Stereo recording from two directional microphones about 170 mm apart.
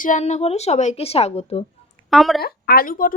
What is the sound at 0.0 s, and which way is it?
A woman's voice, 45° left (ahead or behind).